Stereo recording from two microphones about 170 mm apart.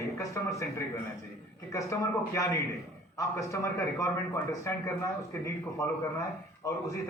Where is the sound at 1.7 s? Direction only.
20° left (ahead or behind).